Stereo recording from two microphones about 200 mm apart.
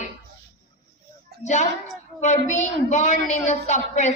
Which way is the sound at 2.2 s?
35° left (ahead or behind).